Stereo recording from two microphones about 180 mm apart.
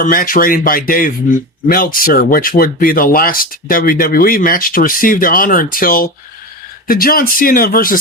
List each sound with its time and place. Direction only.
0.0 s speech: 50° left (ahead or behind)